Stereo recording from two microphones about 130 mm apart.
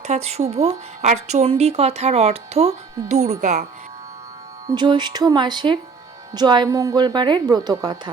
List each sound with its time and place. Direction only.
0.0 s speech: 55° right (ahead or behind)
4.6 s a woman's voice: 35° right (ahead or behind)